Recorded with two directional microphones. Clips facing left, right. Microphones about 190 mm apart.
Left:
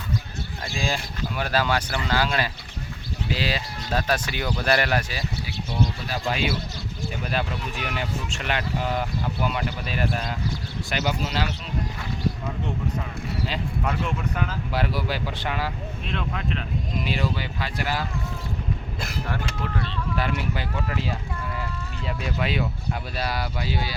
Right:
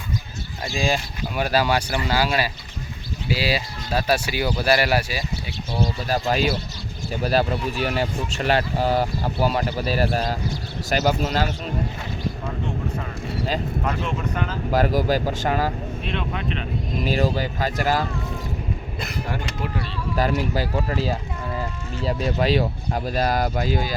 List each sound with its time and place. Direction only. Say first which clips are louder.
0.6 s speech: right 5 dB; 15° right (ahead or behind)
6.1 s speech: right 5 dB; 40° right (ahead or behind)
14.3 s speech: right 2 dB; 5° left (ahead or behind)
14.7 s speech: right 10 dB; 45° right (ahead or behind)
16.0 s speech: right 1 dB; centre (ahead or behind)
17.0 s speech: right 6 dB; 40° right (ahead or behind)
19.3 s speech: right 1 dB; 15° right (ahead or behind)
20.1 s speech: right 7 dB; 40° right (ahead or behind)